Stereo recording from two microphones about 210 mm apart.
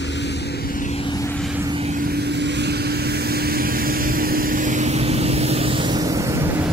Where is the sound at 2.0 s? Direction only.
50° right (ahead or behind).